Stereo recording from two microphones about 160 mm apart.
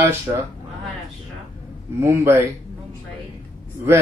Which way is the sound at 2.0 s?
15° right (ahead or behind).